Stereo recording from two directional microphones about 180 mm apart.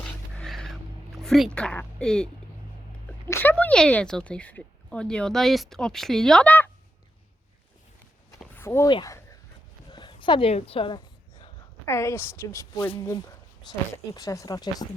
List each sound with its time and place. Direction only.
0.0 s music: 5° left (ahead or behind)
1.2 s speech: centre (ahead or behind)
8.5 s speech: 15° left (ahead or behind)
8.9 s a woman's voice: 25° left (ahead or behind)